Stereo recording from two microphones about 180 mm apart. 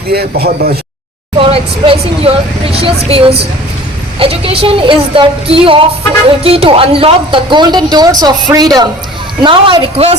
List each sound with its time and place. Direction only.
0.1 s speech: 60° right (ahead or behind)
1.4 s speech: 30° right (ahead or behind)